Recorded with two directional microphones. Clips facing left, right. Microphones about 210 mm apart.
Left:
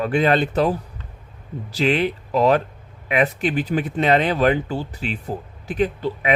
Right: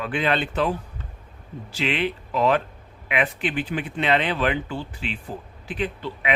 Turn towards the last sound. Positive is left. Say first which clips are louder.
# left 7 dB
turn(degrees=40)  # may be behind; listen again after turning